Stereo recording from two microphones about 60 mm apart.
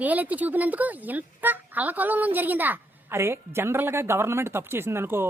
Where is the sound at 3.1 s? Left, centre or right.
Right.